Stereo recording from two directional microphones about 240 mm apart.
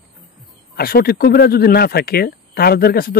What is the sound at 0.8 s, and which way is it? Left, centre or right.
A man's voice, left.